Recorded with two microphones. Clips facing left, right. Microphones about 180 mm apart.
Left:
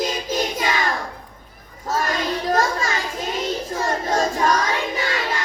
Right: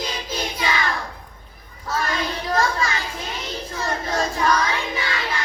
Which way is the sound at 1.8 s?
45° left (ahead or behind).